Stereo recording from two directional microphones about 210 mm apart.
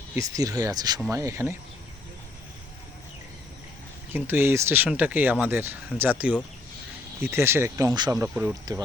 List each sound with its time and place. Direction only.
0.2 s speech: 15° right (ahead or behind)
4.1 s speech: 10° right (ahead or behind)